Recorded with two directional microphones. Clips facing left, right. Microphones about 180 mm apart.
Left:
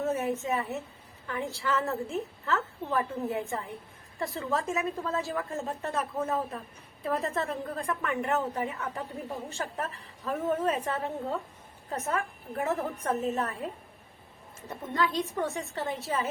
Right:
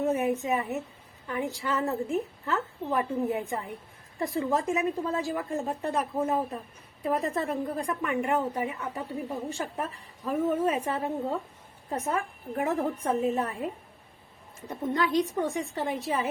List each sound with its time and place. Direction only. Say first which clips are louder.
0.0 s a woman's voice: right 3 dB; 15° right (ahead or behind)
14.7 s a woman's voice: right 3 dB; 15° right (ahead or behind)